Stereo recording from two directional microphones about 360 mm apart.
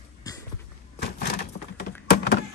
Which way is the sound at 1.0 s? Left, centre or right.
Left.